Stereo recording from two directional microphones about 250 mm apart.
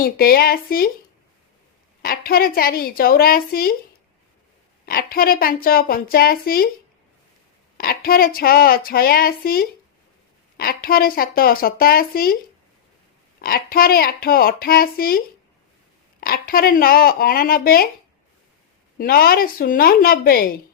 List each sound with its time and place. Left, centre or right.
0.0 s speech: left
2.0 s speech: left
4.9 s speech: left
7.8 s speech: left
13.4 s speech: left
16.2 s speech: left
18.9 s speech: left